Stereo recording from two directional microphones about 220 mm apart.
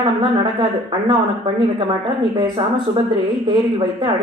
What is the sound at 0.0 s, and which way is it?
Speech, 20° right (ahead or behind).